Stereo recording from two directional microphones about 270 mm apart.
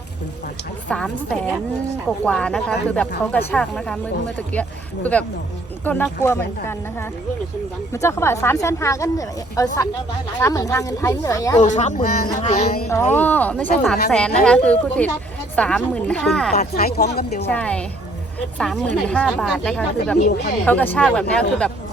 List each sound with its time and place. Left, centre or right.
0.9 s speech: centre
5.8 s speech: centre
11.6 s speech: left
12.9 s speech: centre
16.6 s speech: left
17.5 s speech: centre
20.1 s speech: left
20.7 s speech: centre